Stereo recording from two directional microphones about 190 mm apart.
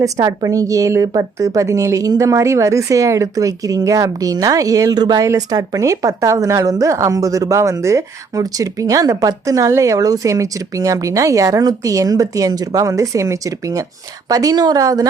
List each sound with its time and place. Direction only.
0.0 s speech: 15° right (ahead or behind)